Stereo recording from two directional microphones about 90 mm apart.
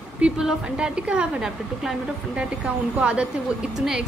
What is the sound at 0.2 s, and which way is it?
Speech, 10° right (ahead or behind).